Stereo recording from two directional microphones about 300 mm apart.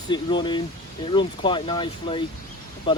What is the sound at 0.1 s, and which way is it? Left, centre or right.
Speech, centre.